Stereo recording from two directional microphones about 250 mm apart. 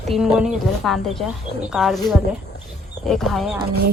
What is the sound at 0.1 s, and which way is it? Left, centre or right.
Speech, centre.